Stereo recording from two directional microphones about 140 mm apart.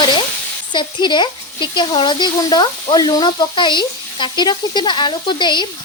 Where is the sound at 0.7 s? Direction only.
35° left (ahead or behind).